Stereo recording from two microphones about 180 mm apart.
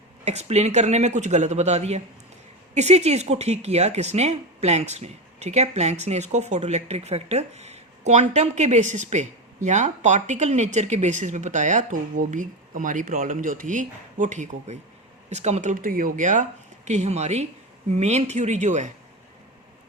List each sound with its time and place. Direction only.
0.3 s speech: 35° right (ahead or behind)